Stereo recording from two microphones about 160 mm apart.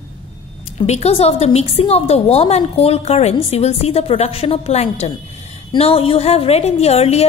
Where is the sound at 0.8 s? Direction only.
40° left (ahead or behind).